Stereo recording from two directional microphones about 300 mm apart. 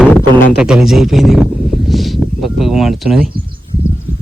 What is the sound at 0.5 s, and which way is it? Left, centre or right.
Speech, centre.